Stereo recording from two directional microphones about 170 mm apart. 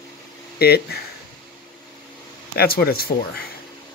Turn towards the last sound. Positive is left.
turn(degrees=65)  # may be behind; listen again after turning